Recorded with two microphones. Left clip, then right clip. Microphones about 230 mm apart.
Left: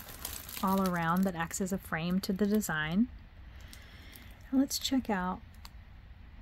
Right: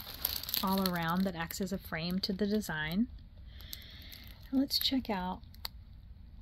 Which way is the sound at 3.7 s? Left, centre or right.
Right.